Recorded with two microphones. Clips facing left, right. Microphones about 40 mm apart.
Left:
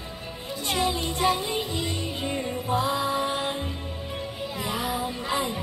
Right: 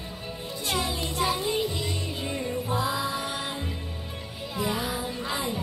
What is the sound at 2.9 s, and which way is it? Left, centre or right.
Mantra, left.